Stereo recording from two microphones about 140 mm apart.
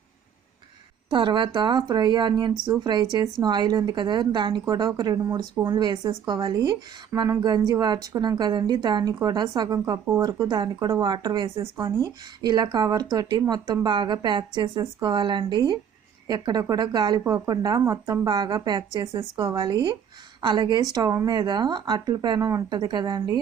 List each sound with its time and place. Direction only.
1.1 s a woman's voice: 35° right (ahead or behind)